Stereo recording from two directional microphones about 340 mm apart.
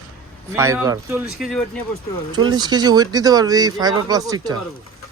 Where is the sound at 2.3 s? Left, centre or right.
Centre.